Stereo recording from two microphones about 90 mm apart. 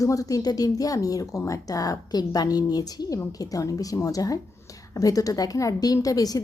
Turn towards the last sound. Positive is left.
turn(degrees=40)  # may be behind; listen again after turning